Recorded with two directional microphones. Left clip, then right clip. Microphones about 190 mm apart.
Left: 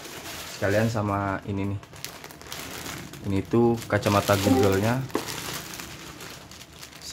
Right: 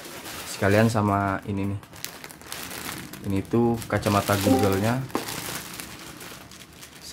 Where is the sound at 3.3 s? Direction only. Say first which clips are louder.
Left 1 dB; 5° left (ahead or behind).